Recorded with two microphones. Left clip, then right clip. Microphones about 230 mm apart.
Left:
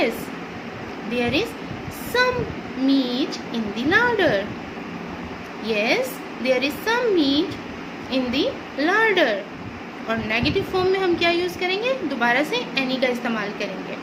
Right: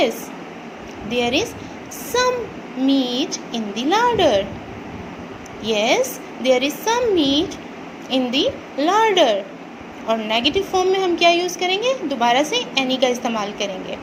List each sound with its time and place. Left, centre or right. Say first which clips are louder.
1.1 s a woman's voice: right 3 dB; centre
2.9 s speech: right 2 dB; right
3.2 s a woman's voice: right 2 dB; centre
5.6 s a woman's voice: right 4 dB; centre